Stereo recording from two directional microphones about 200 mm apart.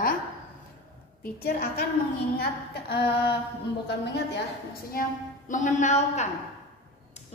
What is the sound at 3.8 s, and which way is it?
Speech, 60° left (ahead or behind).